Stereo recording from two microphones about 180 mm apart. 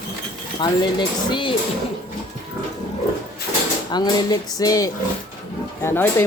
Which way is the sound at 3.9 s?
25° left (ahead or behind).